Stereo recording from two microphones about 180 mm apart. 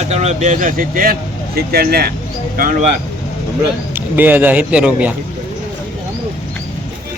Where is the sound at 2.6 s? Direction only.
45° right (ahead or behind).